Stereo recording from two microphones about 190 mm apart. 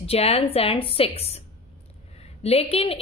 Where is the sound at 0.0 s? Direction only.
30° left (ahead or behind).